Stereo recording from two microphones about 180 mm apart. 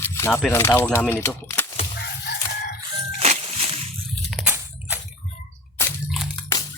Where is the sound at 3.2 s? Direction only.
35° right (ahead or behind).